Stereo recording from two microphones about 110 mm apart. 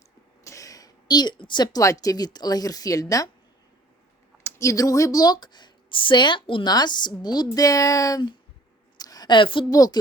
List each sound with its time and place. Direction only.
0.4 s speech: 30° left (ahead or behind)
4.4 s speech: 25° left (ahead or behind)
9.0 s a sound: 35° left (ahead or behind)
9.6 s speech: 35° left (ahead or behind)